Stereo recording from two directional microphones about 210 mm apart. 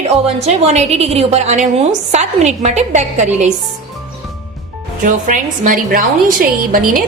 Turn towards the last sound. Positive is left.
turn(degrees=-40)  # may be behind; listen again after turning